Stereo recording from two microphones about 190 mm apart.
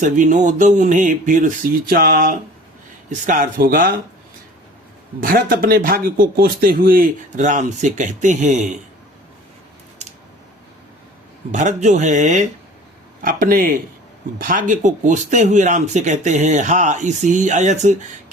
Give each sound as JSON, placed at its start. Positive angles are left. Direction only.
{"t": 0.0, "sound": "a man's voice", "side_deg": -40}
{"t": 5.2, "sound": "a man's voice", "side_deg": -50}
{"t": 11.5, "sound": "a man's voice", "side_deg": -40}